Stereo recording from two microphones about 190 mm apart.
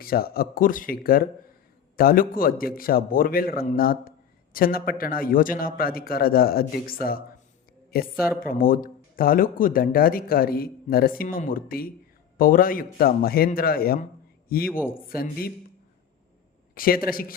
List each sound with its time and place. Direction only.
0.0 s speech: 50° left (ahead or behind)
16.7 s a man's voice: 50° left (ahead or behind)